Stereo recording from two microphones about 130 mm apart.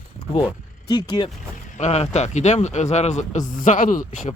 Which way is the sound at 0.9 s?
35° left (ahead or behind).